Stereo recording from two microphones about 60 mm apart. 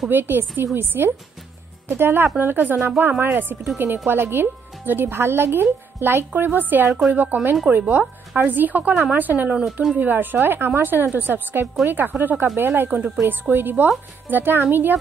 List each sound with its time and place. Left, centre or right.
0.1 s speech: right
12.9 s speech: right
13.3 s speech: right